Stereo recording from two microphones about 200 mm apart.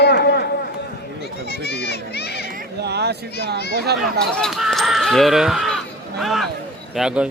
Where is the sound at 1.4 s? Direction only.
55° left (ahead or behind).